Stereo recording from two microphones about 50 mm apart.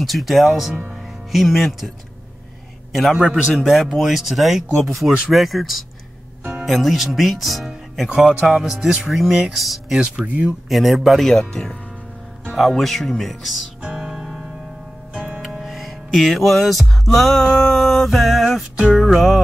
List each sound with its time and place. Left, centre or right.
0.0 s speech: centre
2.9 s a man's voice: centre
10.1 s speech: right
10.7 s speech: centre
13.9 s music: centre
15.1 s music: right
15.4 s music: centre
19.0 s speech: centre